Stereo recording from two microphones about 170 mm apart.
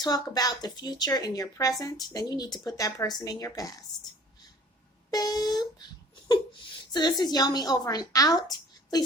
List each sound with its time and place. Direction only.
0.0 s a woman's voice: 20° left (ahead or behind)
5.1 s a woman's voice: 25° left (ahead or behind)
6.9 s a woman's voice: 25° left (ahead or behind)